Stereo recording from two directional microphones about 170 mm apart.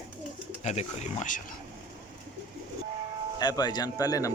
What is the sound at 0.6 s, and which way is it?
Speech, 40° left (ahead or behind).